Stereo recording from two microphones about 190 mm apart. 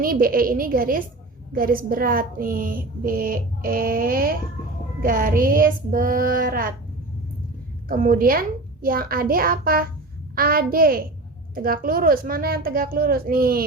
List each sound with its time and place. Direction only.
0.0 s speech: 50° right (ahead or behind)
7.9 s speech: 45° right (ahead or behind)